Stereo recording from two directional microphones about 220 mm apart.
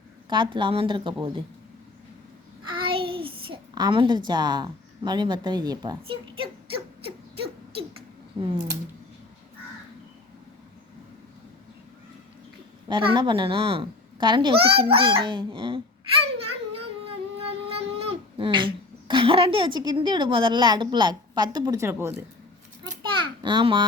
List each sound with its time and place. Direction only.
0.3 s a child's voice: 20° right (ahead or behind)
2.8 s a child's voice: 25° right (ahead or behind)
8.4 s speech: 15° right (ahead or behind)
12.9 s a child's voice: 20° right (ahead or behind)
16.4 s music: 25° right (ahead or behind)
17.3 s speech: 25° right (ahead or behind)
23.1 s a sound: 20° right (ahead or behind)